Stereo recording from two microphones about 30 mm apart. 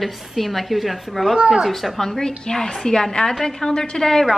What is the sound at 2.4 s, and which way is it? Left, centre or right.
A woman's voice, left.